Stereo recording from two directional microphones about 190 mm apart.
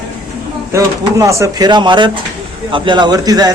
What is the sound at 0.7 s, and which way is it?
Speech, 15° right (ahead or behind).